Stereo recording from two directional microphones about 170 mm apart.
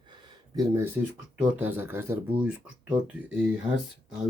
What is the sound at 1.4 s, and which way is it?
Speech, 10° right (ahead or behind).